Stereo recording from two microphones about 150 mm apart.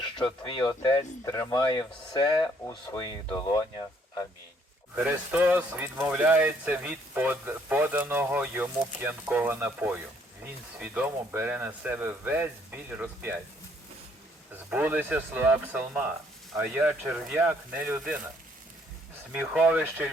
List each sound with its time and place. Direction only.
0.0 s speech: 35° left (ahead or behind)
4.9 s speech: 10° right (ahead or behind)
14.5 s speech: 10° right (ahead or behind)
19.3 s speech: 10° right (ahead or behind)